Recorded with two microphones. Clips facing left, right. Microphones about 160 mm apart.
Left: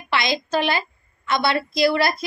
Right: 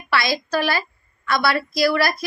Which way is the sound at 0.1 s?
20° left (ahead or behind).